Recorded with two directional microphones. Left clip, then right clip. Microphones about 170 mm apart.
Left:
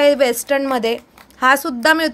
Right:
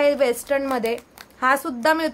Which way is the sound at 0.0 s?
30° left (ahead or behind).